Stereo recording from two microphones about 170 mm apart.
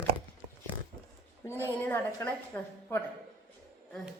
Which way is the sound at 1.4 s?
15° left (ahead or behind).